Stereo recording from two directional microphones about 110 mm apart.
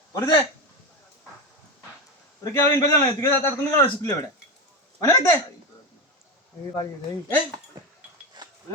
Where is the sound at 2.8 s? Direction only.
30° left (ahead or behind).